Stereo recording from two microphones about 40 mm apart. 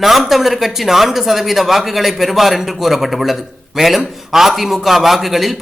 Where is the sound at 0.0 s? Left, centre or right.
Centre.